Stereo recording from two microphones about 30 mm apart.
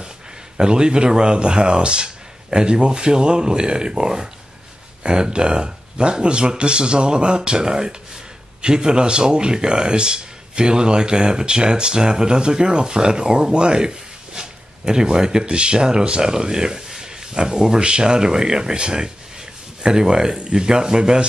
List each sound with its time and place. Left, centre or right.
0.6 s speech: right
15.4 s speech: right